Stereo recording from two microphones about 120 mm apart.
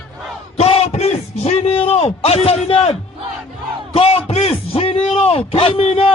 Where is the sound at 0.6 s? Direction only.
55° left (ahead or behind).